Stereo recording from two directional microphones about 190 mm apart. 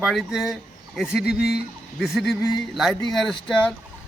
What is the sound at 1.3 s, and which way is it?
Speech, 55° left (ahead or behind).